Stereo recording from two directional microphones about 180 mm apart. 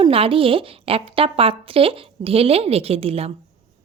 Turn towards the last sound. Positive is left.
turn(degrees=-35)  # may be behind; listen again after turning